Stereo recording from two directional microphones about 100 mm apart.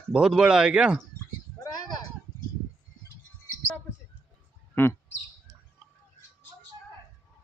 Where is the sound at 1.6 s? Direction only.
40° left (ahead or behind).